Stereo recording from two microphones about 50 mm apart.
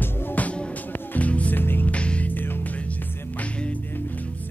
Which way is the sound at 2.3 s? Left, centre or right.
Left.